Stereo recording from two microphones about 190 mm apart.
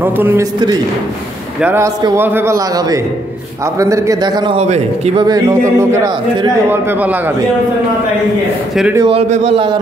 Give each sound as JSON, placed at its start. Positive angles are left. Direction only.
{"t": 0.0, "sound": "a man's voice", "side_deg": -10}
{"t": 1.6, "sound": "a man's voice", "side_deg": -15}
{"t": 8.9, "sound": "speech", "side_deg": -25}